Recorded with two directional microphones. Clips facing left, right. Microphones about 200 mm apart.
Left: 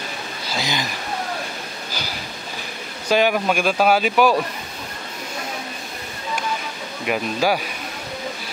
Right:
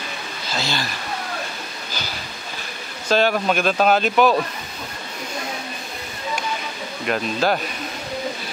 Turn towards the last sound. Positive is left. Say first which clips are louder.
# even
turn(degrees=10)  # may be behind; listen again after turning